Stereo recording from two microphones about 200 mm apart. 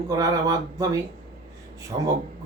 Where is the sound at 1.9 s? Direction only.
30° right (ahead or behind).